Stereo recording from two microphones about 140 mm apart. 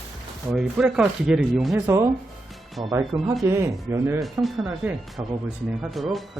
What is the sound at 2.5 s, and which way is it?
Music, centre (ahead or behind).